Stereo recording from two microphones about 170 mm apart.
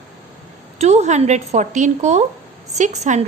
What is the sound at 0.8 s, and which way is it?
A woman's voice, 40° right (ahead or behind).